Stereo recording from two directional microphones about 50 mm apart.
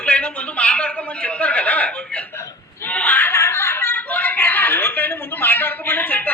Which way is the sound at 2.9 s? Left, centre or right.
Left.